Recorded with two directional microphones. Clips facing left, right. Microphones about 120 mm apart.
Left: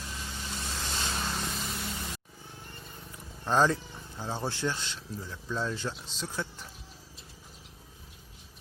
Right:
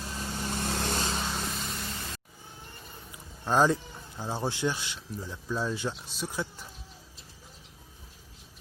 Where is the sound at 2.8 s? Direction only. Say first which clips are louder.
Left 1 dB; 5° right (ahead or behind).